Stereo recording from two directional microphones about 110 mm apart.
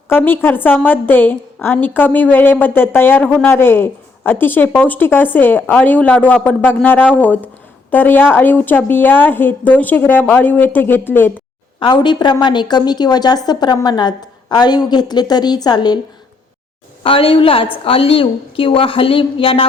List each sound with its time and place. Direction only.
0.1 s a woman's voice: 20° left (ahead or behind)
11.8 s a woman's voice: 45° left (ahead or behind)
17.0 s a woman's voice: 55° left (ahead or behind)